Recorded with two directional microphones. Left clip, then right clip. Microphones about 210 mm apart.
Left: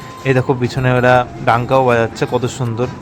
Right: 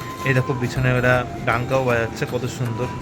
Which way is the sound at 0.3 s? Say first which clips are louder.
Left 7 dB; 15° left (ahead or behind).